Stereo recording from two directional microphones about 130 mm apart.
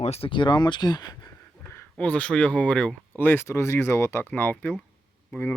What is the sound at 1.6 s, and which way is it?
Speech, 20° left (ahead or behind).